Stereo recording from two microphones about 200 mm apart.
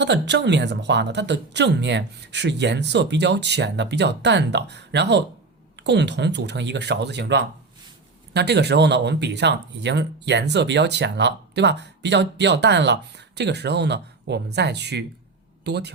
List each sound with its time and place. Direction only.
0.0 s speech: 60° right (ahead or behind)